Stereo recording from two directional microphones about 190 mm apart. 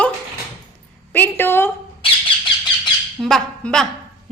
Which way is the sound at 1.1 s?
10° left (ahead or behind).